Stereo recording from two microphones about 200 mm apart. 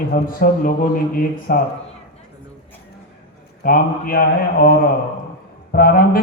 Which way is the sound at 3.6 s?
45° left (ahead or behind).